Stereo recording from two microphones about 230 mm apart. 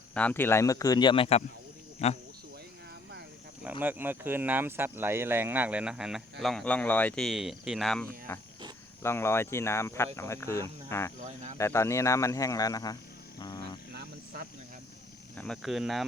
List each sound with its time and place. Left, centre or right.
0.1 s speech: centre; by 2.2 s left
3.6 s speech: centre
13.9 s vehicle: right
15.4 s speech: centre